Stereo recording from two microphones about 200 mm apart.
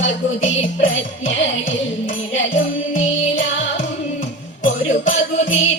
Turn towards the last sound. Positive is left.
turn(degrees=70)  # may be behind; listen again after turning